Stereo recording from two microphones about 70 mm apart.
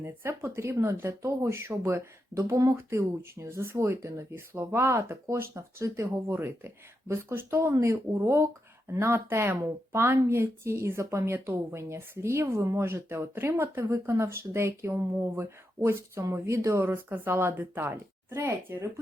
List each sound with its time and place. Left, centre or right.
0.0 s speech: right